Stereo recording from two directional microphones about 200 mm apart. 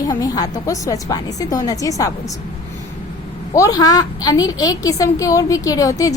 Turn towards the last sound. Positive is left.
turn(degrees=15)  # may be behind; listen again after turning